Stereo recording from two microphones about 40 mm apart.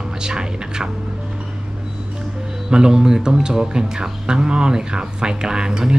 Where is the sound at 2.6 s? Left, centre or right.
Centre.